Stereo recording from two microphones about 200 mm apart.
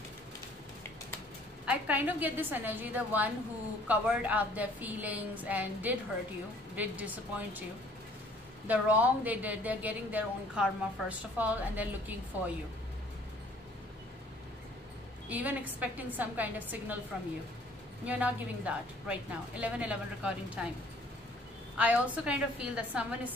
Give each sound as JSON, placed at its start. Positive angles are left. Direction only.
{"t": 1.7, "sound": "a woman's voice", "side_deg": -10}
{"t": 8.6, "sound": "a woman's voice", "side_deg": -10}
{"t": 15.2, "sound": "a woman's voice", "side_deg": -10}
{"t": 21.7, "sound": "a woman's voice", "side_deg": -5}